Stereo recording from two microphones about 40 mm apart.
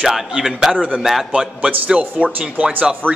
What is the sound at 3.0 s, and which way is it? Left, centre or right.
Speech, right.